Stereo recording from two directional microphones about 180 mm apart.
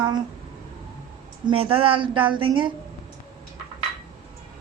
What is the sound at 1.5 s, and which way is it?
Speech, 30° right (ahead or behind).